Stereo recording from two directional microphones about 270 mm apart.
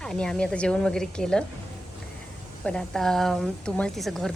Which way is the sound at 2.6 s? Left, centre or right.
Centre.